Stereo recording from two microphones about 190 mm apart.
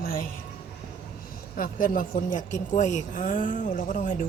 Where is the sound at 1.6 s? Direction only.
45° left (ahead or behind).